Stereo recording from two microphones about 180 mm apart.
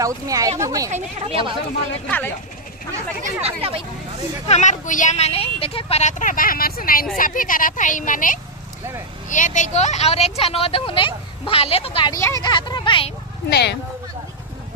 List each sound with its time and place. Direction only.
0.0 s speech: 20° right (ahead or behind)
0.9 s speech: 30° right (ahead or behind)
2.0 s speech: 10° left (ahead or behind)
3.4 s speech: 30° right (ahead or behind)
4.5 s speech: 40° left (ahead or behind)
12.1 s speech: 20° left (ahead or behind)
13.5 s speech: 65° left (ahead or behind)